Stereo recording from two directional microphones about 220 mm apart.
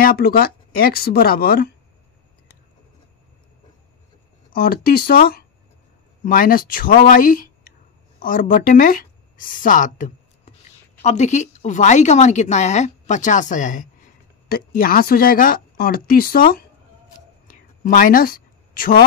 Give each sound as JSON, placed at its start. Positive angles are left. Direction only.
{"t": 0.0, "sound": "speech", "side_deg": 45}
{"t": 4.5, "sound": "speech", "side_deg": 45}
{"t": 17.5, "sound": "a sound", "side_deg": 40}